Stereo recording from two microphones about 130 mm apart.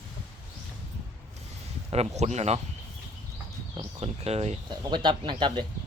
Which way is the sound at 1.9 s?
55° right (ahead or behind).